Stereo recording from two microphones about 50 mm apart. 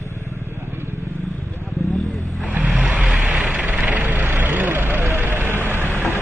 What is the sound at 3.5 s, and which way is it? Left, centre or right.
Vehicle, right.